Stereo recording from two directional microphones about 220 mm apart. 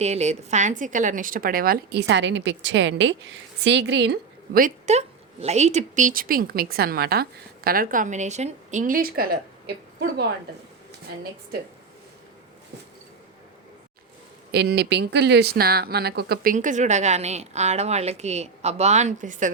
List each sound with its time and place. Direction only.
0.0 s a woman's voice: 30° right (ahead or behind); by 10.2 s 45° right (ahead or behind)
14.5 s a woman's voice: 50° right (ahead or behind)